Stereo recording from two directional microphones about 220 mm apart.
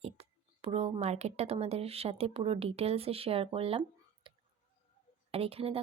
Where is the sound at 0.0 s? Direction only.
25° right (ahead or behind).